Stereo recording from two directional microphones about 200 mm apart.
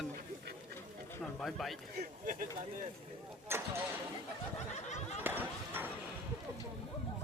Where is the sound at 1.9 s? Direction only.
45° right (ahead or behind).